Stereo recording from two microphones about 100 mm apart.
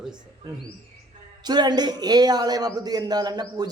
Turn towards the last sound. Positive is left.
turn(degrees=-40)  # may be behind; listen again after turning